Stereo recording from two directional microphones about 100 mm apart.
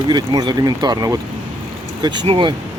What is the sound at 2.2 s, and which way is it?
Speech, 60° right (ahead or behind).